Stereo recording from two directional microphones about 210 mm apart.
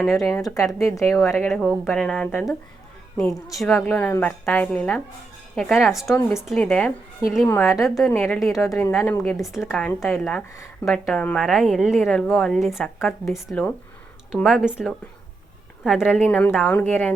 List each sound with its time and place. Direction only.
0.3 s a woman's voice: 15° left (ahead or behind)